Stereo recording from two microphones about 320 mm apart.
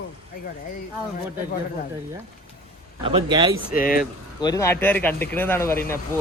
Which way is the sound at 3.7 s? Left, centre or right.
Left.